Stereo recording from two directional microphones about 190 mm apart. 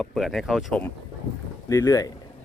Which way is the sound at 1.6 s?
15° left (ahead or behind).